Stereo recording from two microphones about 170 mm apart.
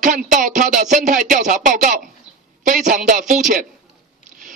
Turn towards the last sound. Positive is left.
turn(degrees=-50)  # may be behind; listen again after turning